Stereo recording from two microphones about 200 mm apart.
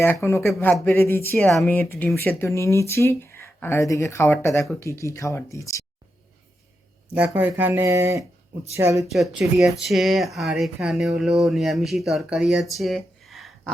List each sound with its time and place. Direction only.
0.0 s speech: 10° left (ahead or behind)
7.1 s speech: 5° right (ahead or behind)
9.1 s speech: centre (ahead or behind)